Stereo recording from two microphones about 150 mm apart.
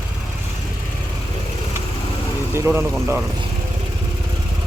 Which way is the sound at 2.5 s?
15° right (ahead or behind).